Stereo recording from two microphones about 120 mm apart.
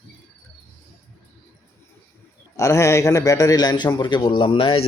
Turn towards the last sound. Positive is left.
turn(degrees=50)  # may be behind; listen again after turning